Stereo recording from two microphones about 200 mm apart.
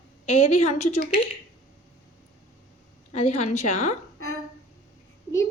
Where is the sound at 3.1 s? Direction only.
30° left (ahead or behind).